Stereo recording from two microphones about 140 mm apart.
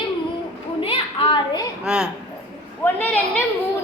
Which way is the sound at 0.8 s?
40° left (ahead or behind).